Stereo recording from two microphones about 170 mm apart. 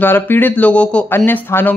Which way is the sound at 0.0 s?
10° left (ahead or behind).